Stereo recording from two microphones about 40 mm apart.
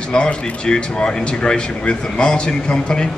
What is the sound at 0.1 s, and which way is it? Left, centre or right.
A man's voice, left.